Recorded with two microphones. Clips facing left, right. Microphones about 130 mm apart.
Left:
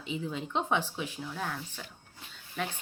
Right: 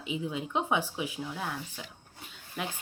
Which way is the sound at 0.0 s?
10° right (ahead or behind).